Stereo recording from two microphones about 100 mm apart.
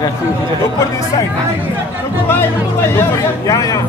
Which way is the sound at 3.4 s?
35° left (ahead or behind).